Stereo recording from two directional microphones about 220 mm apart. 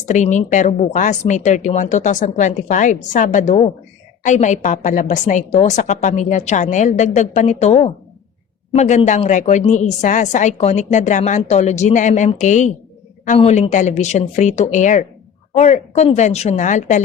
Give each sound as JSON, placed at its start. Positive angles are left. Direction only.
{"t": 0.1, "sound": "a woman's voice", "side_deg": 35}